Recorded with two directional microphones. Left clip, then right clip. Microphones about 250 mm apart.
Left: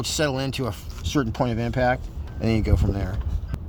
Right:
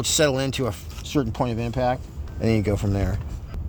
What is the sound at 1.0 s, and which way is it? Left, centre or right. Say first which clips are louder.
Speech: even; centre.